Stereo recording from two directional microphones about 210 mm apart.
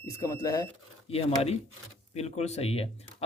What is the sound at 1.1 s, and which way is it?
A man's voice, 30° left (ahead or behind).